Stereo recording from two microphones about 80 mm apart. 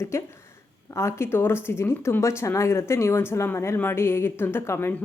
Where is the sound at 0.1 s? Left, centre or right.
Left.